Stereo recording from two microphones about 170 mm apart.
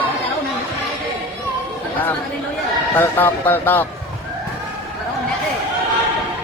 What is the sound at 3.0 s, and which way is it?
Speech, 10° left (ahead or behind).